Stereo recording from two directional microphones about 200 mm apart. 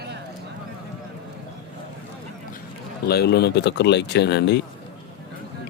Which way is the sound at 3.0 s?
55° left (ahead or behind).